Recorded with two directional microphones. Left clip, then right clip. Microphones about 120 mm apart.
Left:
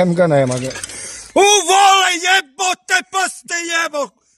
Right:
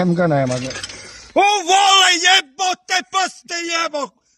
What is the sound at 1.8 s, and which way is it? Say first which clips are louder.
A man's voice: left 1 dB; 20° left (ahead or behind).